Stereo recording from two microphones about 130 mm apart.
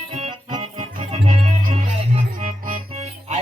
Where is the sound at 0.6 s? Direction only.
50° right (ahead or behind).